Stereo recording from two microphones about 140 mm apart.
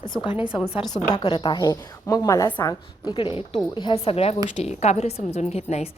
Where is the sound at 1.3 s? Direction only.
35° left (ahead or behind).